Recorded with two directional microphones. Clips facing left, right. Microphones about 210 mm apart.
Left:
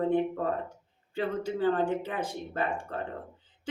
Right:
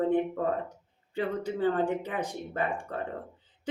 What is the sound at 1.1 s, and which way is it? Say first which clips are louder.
Speech: even; 20° right (ahead or behind).